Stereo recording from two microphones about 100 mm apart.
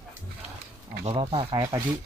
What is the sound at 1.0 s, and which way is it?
Speech, 75° right (ahead or behind).